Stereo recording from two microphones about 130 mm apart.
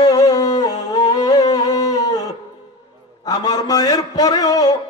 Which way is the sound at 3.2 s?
30° left (ahead or behind).